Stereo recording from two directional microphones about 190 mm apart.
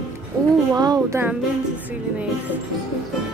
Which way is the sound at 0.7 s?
20° right (ahead or behind).